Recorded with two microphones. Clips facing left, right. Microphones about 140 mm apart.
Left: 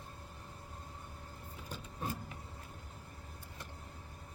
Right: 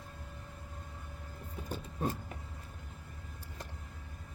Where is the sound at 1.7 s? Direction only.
40° right (ahead or behind).